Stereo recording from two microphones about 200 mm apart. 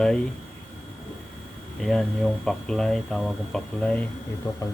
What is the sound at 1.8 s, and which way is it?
Speech, centre (ahead or behind).